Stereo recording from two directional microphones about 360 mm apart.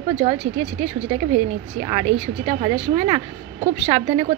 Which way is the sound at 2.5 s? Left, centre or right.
Centre.